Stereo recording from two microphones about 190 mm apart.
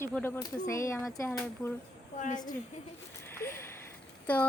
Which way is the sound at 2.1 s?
40° left (ahead or behind).